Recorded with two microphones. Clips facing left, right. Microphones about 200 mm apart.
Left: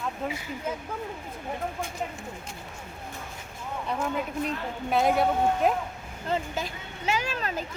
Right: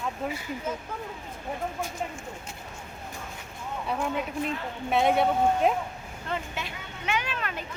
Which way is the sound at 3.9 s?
Centre (ahead or behind).